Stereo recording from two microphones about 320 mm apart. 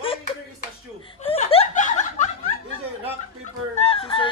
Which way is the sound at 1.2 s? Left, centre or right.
Centre.